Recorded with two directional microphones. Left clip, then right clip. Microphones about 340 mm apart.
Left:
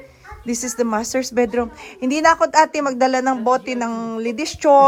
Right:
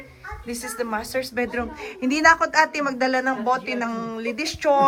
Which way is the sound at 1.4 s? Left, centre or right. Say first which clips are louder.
Left 7 dB; centre.